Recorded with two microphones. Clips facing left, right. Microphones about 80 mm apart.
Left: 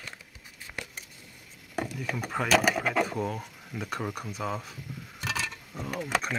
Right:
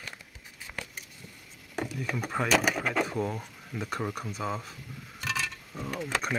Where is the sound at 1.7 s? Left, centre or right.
Centre.